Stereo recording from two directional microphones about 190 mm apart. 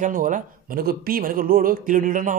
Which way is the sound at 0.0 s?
45° right (ahead or behind).